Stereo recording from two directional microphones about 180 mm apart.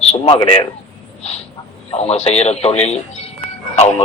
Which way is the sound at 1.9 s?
35° left (ahead or behind).